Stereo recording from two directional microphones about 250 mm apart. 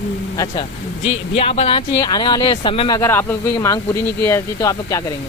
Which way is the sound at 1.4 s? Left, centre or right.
Left.